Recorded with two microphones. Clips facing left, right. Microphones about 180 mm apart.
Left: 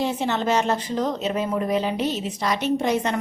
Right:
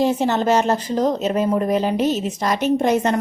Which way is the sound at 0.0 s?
40° right (ahead or behind).